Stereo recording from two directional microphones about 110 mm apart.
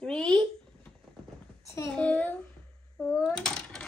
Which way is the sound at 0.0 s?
10° left (ahead or behind).